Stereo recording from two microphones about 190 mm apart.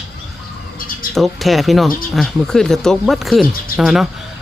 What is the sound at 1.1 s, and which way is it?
Speech, centre (ahead or behind).